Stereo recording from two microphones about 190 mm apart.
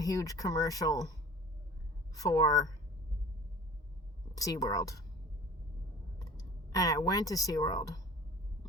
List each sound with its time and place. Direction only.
0.0 s speech: 20° left (ahead or behind)
2.1 s speech: 20° left (ahead or behind)
4.4 s speech: 20° left (ahead or behind)
6.1 s speech: 20° left (ahead or behind)